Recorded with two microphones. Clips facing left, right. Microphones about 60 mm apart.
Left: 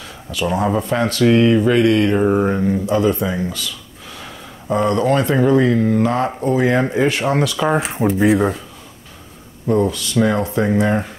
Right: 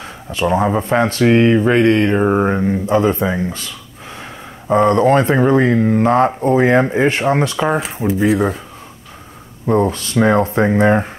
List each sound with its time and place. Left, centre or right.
0.0 s a sound: right
0.7 s speech: right
2.1 s speech: right
8.2 s speech: centre
9.7 s speech: right